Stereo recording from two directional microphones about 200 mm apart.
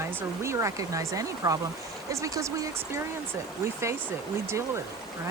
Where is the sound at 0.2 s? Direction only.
15° right (ahead or behind).